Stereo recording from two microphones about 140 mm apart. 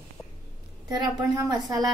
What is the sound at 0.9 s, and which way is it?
Speech, 25° right (ahead or behind).